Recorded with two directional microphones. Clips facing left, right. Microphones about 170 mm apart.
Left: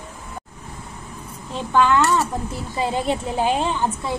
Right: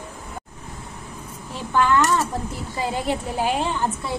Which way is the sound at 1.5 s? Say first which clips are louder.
Left 2 dB; 20° left (ahead or behind).